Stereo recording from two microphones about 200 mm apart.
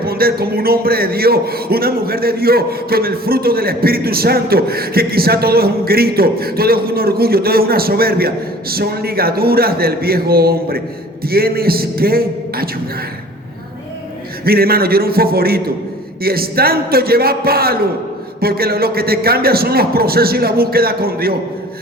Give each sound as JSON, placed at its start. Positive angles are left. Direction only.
{"t": 0.0, "sound": "a man's voice", "side_deg": -50}
{"t": 14.4, "sound": "a man's voice", "side_deg": -50}